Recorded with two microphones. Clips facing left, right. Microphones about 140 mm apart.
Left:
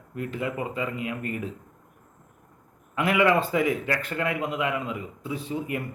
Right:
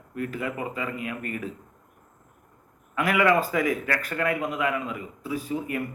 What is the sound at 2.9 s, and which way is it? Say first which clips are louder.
A man's voice: even; 25° left (ahead or behind).